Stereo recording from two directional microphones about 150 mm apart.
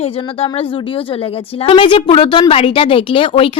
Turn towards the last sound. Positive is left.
turn(degrees=35)  # may be behind; listen again after turning